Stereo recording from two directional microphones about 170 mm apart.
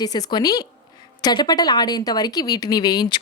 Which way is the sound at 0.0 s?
25° left (ahead or behind).